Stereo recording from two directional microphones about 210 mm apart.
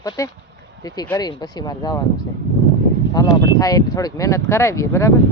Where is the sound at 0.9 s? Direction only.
20° left (ahead or behind).